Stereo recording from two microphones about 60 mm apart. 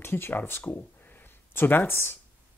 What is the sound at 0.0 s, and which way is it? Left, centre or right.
Speech, left.